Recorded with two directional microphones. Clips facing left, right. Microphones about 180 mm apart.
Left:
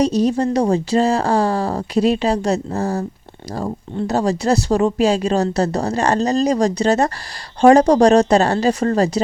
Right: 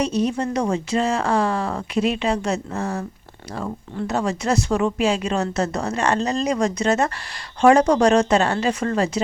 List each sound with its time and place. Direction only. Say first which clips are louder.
0.0 s speech: left 5 dB; 35° left (ahead or behind)